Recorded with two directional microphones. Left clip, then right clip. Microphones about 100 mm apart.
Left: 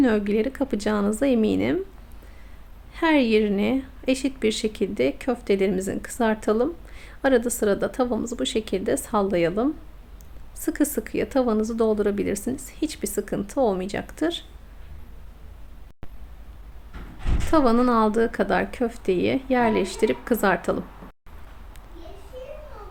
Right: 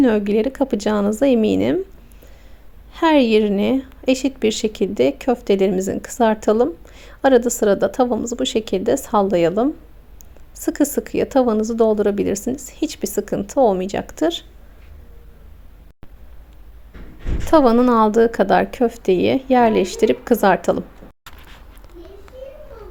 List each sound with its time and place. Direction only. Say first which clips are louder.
0.0 s a woman's voice: right 5 dB; 35° right (ahead or behind)
2.9 s a woman's voice: right 6 dB; 35° right (ahead or behind)
17.5 s a woman's voice: right 6 dB; 40° right (ahead or behind)